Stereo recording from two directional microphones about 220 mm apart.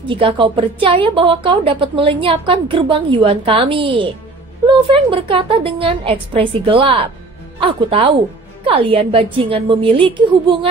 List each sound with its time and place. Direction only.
0.1 s a woman's voice: 25° right (ahead or behind)